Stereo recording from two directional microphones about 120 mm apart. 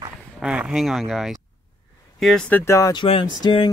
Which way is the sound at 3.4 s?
40° left (ahead or behind).